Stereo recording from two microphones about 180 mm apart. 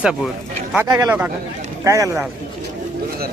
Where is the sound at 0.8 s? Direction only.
15° right (ahead or behind).